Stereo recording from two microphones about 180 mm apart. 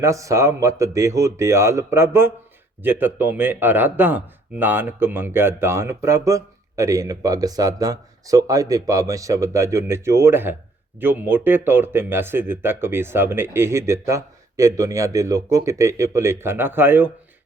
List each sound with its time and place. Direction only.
0.0 s speech: 15° right (ahead or behind)